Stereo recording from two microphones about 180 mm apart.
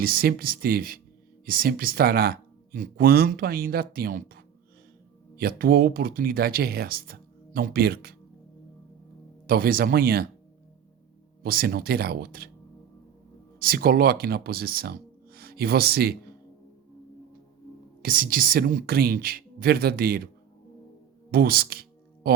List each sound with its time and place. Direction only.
0.0 s speech: 55° right (ahead or behind)
9.5 s speech: 55° right (ahead or behind)
11.4 s speech: 55° right (ahead or behind)
13.6 s speech: 55° right (ahead or behind)
18.0 s speech: 55° right (ahead or behind)
21.2 s music: 55° right (ahead or behind)